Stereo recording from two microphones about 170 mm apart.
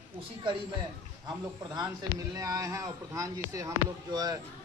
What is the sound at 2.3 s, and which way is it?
A man's voice, 20° right (ahead or behind).